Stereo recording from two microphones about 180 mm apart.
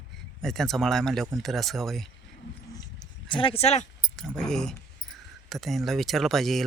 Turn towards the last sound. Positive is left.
turn(degrees=0)  # may be behind; listen again after turning